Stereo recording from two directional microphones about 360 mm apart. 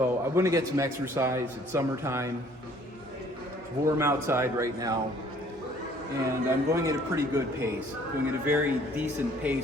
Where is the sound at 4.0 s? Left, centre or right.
Centre.